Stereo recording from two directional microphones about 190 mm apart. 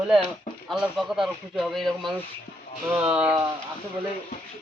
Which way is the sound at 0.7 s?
Centre (ahead or behind).